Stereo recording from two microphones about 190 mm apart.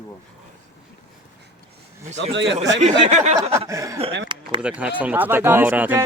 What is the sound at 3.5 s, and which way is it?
Speech, 15° right (ahead or behind).